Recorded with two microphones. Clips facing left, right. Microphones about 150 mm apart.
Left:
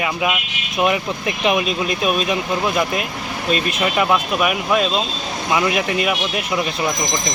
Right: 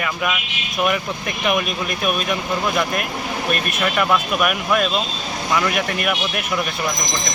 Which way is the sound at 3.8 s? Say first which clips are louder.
Even; 15° left (ahead or behind).